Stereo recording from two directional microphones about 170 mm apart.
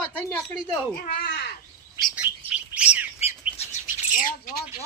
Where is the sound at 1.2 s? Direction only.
70° left (ahead or behind).